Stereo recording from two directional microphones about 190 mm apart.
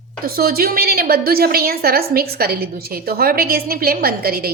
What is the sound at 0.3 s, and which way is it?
A woman's voice, 50° right (ahead or behind).